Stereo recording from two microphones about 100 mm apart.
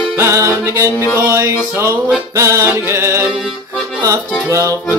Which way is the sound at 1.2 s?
20° right (ahead or behind).